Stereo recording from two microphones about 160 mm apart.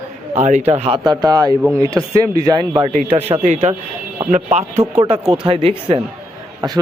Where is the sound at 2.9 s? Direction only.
40° right (ahead or behind).